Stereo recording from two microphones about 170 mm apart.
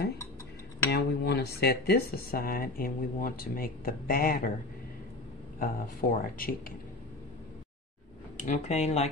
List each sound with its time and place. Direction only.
0.9 s speech: 75° left (ahead or behind)
5.6 s speech: 60° left (ahead or behind)
8.5 s speech: 40° left (ahead or behind)